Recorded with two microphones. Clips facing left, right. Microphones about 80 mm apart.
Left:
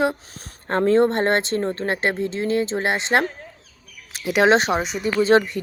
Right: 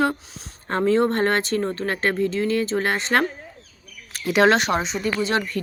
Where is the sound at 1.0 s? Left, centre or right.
Left.